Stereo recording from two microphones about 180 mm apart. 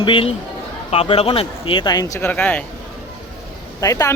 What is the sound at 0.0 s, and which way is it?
Speech, 30° left (ahead or behind).